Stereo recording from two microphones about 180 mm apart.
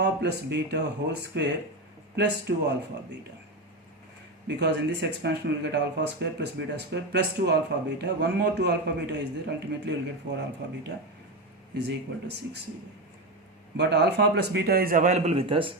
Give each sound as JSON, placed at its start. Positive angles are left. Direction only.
{"t": 0.0, "sound": "speech", "side_deg": -70}
{"t": 4.4, "sound": "speech", "side_deg": -70}
{"t": 13.7, "sound": "speech", "side_deg": -70}